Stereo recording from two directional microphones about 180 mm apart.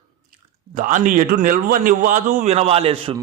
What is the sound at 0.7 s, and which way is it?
Speech, 50° right (ahead or behind).